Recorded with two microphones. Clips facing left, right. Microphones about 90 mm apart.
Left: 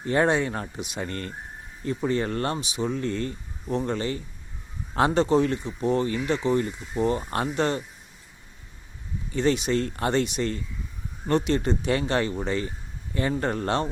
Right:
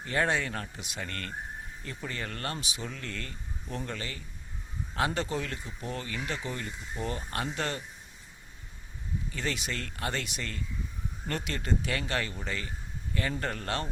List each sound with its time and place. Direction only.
0.0 s speech: 25° left (ahead or behind)
9.3 s speech: 25° left (ahead or behind)